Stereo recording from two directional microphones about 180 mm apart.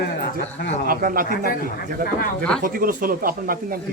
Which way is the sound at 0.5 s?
65° left (ahead or behind).